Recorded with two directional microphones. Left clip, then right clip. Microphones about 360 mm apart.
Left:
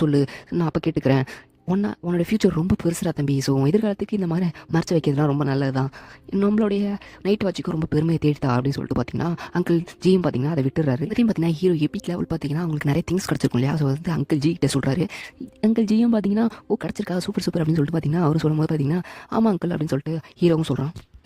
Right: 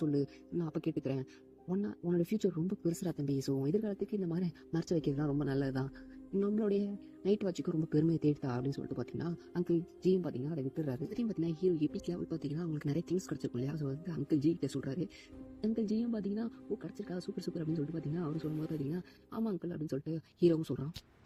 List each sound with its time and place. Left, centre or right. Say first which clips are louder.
0.2 s speech: left 13 dB; left